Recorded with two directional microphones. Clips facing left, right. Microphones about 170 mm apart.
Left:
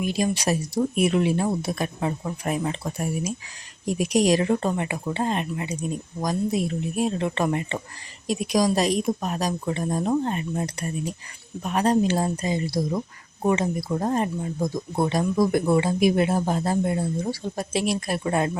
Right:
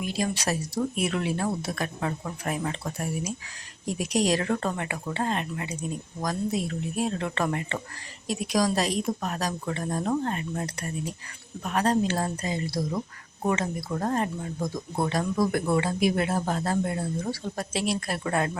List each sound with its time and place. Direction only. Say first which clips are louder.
0.0 s speech: left 4 dB; 15° left (ahead or behind)